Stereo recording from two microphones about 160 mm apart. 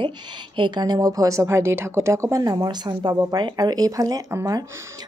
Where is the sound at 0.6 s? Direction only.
25° right (ahead or behind).